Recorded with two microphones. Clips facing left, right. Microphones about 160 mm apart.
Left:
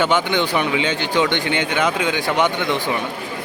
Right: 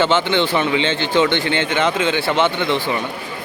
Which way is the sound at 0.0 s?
15° left (ahead or behind).